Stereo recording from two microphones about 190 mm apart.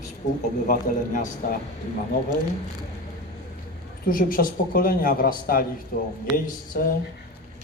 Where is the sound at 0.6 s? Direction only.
45° left (ahead or behind).